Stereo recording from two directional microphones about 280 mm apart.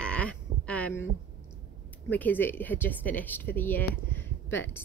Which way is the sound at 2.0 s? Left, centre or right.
Centre.